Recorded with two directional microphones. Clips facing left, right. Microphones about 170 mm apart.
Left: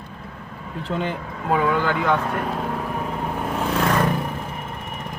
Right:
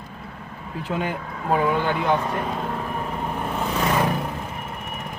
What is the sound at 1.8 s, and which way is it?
Speech, 25° right (ahead or behind).